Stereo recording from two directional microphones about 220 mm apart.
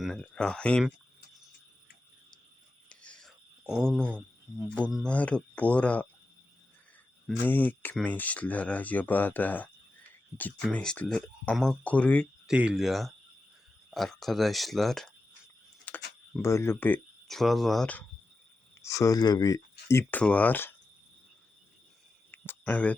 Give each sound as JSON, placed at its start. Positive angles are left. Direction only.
{"t": 0.0, "sound": "speech", "side_deg": 0}
{"t": 2.9, "sound": "whispering", "side_deg": 5}
{"t": 4.1, "sound": "speech", "side_deg": 0}
{"t": 7.3, "sound": "speech", "side_deg": 10}
{"t": 15.9, "sound": "a sound", "side_deg": 5}
{"t": 16.4, "sound": "speech", "side_deg": 10}
{"t": 22.3, "sound": "a sound", "side_deg": 10}